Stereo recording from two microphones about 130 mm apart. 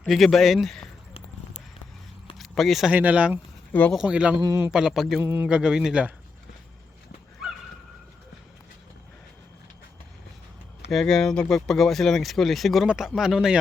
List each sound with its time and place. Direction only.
0.0 s speech: centre (ahead or behind)
2.4 s speech: centre (ahead or behind)
2.9 s speech: 10° right (ahead or behind)
3.7 s speech: 10° left (ahead or behind)
3.9 s speech: 5° right (ahead or behind)
4.4 s a man's voice: 25° right (ahead or behind)
4.7 s speech: 5° right (ahead or behind)
5.2 s speech: 15° right (ahead or behind)
10.9 s speech: 5° left (ahead or behind)